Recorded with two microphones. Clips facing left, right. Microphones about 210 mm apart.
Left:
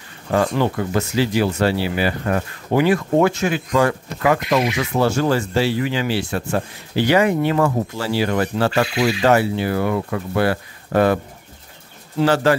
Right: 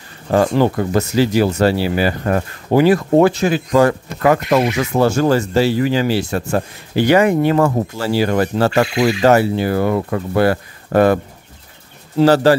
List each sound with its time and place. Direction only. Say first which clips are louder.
0.3 s speech: right 4 dB; 40° right (ahead or behind)
12.2 s speech: right 5 dB; 35° right (ahead or behind)